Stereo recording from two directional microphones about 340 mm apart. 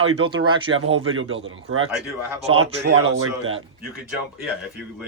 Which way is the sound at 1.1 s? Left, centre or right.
Right.